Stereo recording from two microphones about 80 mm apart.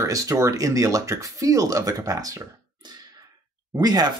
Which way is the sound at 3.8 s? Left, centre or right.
Right.